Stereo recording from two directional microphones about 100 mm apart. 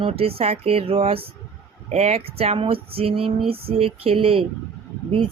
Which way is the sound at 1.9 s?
90° right.